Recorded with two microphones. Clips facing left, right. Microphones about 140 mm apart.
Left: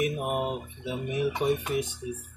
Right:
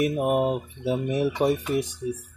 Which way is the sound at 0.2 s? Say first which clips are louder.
Right 7 dB; 35° right (ahead or behind).